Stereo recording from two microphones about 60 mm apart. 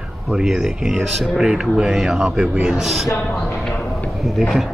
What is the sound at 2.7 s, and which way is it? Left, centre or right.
Speech, centre.